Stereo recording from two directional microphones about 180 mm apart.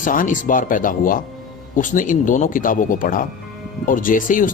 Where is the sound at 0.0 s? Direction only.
45° left (ahead or behind).